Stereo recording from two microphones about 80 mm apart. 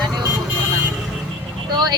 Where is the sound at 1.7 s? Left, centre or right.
Right.